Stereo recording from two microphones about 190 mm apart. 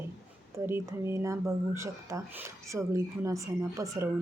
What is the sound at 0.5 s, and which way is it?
Speech, 15° right (ahead or behind).